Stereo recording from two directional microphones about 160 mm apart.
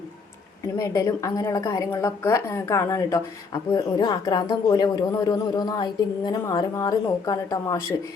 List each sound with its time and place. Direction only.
0.8 s a woman's voice: 20° left (ahead or behind)